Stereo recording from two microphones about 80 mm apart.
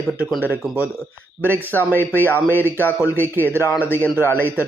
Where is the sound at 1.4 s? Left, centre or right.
Left.